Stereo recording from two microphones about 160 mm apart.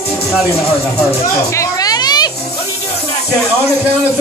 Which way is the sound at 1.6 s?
25° left (ahead or behind).